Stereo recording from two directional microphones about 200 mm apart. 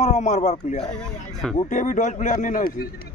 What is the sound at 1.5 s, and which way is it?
A man's voice, 40° left (ahead or behind).